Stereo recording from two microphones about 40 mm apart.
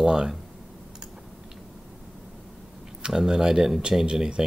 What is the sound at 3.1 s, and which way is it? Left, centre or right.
Speech, centre.